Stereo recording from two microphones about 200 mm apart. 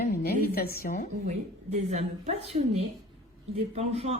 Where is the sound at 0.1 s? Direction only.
50° left (ahead or behind).